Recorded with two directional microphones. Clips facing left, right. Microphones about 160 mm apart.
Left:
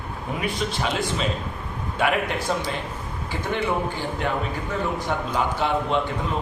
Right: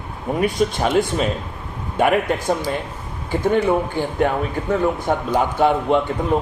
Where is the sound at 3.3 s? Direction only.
45° right (ahead or behind).